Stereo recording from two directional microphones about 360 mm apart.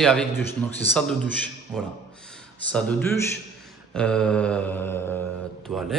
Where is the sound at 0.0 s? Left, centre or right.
Centre.